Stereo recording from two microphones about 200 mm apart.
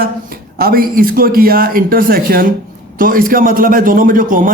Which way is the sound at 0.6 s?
45° right (ahead or behind).